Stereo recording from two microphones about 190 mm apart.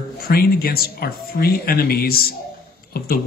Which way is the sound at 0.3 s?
55° left (ahead or behind).